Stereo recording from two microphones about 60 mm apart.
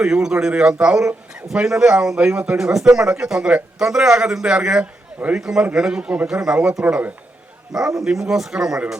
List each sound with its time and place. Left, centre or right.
0.0 s a man's voice: centre